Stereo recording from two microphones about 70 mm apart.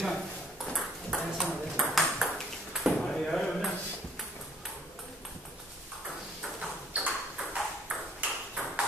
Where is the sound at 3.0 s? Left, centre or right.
Centre.